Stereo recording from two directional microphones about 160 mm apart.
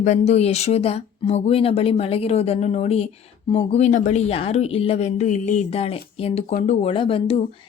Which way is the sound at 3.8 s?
50° left (ahead or behind).